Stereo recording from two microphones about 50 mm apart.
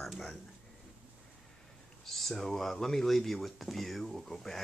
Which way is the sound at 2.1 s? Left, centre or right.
Centre.